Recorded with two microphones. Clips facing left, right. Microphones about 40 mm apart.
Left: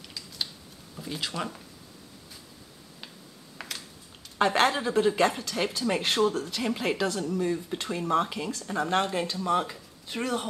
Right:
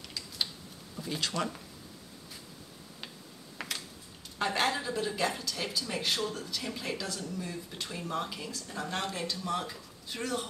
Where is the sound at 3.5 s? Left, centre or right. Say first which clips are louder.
Right 1 dB; centre.